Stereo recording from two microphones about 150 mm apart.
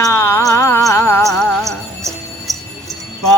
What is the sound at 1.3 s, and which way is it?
Music, centre (ahead or behind).